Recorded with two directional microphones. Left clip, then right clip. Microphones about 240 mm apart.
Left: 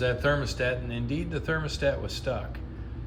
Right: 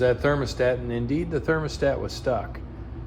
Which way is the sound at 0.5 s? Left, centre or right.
Right.